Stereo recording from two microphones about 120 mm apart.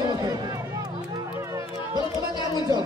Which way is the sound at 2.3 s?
35° left (ahead or behind).